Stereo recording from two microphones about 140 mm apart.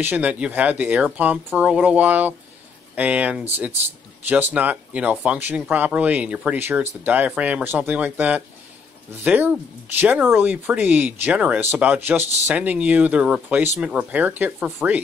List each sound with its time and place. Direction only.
0.0 s speech: 10° right (ahead or behind)